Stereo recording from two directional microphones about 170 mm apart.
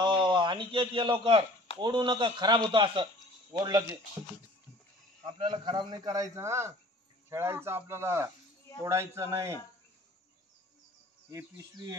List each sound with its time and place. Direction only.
0.0 s a sound: 30° right (ahead or behind)
1.8 s a man's voice: 25° right (ahead or behind)
5.2 s a man's voice: 25° right (ahead or behind)
11.2 s a man's voice: 20° right (ahead or behind)